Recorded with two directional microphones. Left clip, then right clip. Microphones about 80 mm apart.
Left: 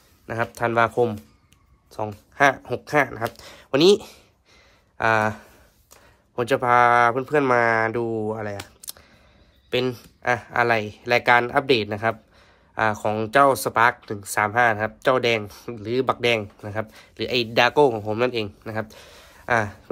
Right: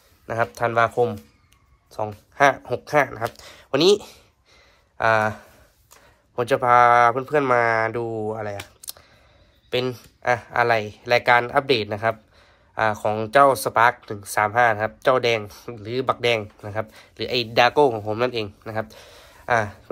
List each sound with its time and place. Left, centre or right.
0.3 s a man's voice: centre
0.7 s speech: left
1.9 s speech: left
3.3 s speech: left
15.8 s speech: left